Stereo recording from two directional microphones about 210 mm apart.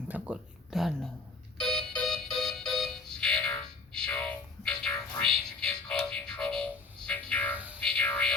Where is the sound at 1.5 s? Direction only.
5° left (ahead or behind).